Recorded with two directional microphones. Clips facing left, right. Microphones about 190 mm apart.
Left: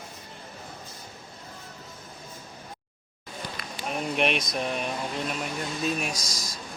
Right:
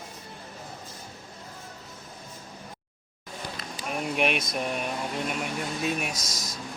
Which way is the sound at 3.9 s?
5° right (ahead or behind).